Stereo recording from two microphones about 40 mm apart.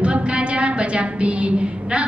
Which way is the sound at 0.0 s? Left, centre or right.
Right.